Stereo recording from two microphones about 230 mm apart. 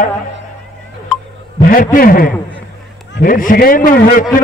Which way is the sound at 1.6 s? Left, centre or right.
Left.